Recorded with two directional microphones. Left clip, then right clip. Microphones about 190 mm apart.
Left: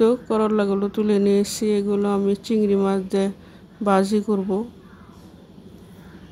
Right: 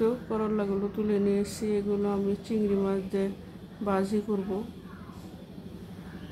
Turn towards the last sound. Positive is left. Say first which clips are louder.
# left 8 dB
turn(degrees=50)  # may be behind; listen again after turning